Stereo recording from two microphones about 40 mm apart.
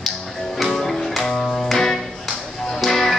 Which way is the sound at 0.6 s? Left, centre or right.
Centre.